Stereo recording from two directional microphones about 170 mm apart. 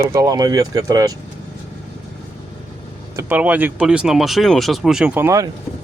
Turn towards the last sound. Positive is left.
turn(degrees=-15)  # may be behind; listen again after turning